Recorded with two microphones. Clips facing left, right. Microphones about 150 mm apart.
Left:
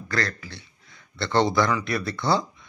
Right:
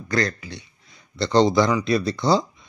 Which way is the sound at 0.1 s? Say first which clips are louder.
Right 5 dB; 20° right (ahead or behind).